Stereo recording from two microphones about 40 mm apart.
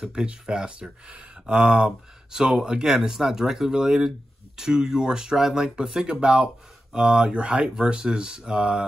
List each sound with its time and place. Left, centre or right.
0.0 s speech: right